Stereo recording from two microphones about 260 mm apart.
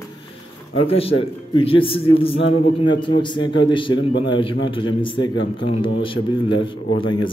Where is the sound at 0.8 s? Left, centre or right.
Left.